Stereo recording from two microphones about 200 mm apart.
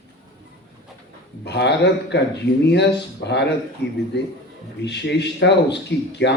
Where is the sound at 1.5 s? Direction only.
60° left (ahead or behind).